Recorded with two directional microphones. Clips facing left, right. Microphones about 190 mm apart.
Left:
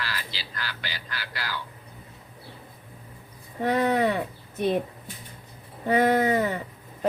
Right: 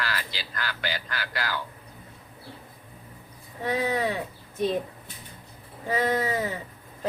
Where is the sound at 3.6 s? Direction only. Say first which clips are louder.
Left 4 dB; 60° left (ahead or behind).